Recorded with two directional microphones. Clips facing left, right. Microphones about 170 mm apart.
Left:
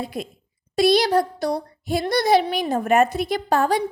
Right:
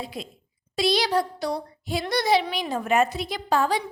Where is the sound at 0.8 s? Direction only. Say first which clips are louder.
Left 6 dB; 50° left (ahead or behind).